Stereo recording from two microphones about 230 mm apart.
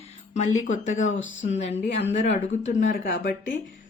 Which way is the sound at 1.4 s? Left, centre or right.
Left.